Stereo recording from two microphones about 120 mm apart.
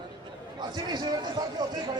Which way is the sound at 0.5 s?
35° right (ahead or behind).